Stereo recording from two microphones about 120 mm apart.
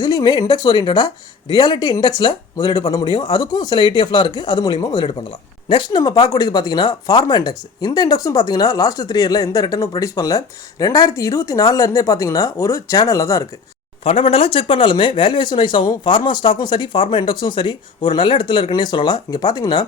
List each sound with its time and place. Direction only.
0.0 s speech: 35° left (ahead or behind)
14.0 s speech: 55° left (ahead or behind); by 19.8 s 35° left (ahead or behind)